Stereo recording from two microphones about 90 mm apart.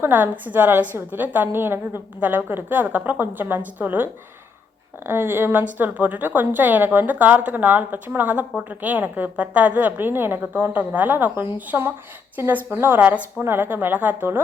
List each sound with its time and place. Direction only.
0.0 s a woman's voice: 20° right (ahead or behind)